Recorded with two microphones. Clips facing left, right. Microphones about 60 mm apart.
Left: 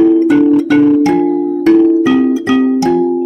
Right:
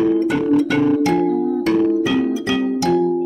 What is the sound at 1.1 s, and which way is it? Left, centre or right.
Music, left.